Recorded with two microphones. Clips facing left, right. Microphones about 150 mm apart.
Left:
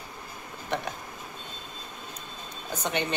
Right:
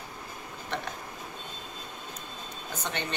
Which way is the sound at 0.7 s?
15° left (ahead or behind).